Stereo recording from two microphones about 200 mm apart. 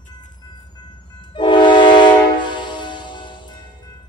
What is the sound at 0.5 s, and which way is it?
Train, 20° left (ahead or behind).